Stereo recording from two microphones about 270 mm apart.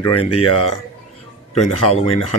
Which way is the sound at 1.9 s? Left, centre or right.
Left.